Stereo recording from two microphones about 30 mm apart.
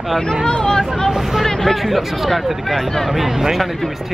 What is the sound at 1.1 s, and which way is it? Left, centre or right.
Speech, centre.